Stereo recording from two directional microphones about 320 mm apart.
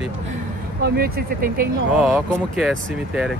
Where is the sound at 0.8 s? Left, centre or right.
Right.